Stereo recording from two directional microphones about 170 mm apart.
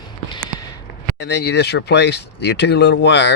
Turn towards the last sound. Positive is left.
turn(degrees=90)